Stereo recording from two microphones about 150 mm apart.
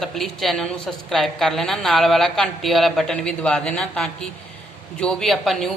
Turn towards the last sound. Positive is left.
turn(degrees=0)  # may be behind; listen again after turning